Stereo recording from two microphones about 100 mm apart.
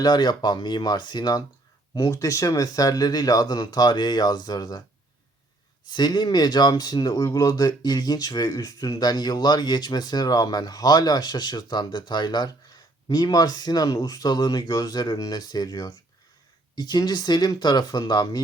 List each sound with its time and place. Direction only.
0.0 s speech: 45° left (ahead or behind)
5.9 s speech: 45° left (ahead or behind)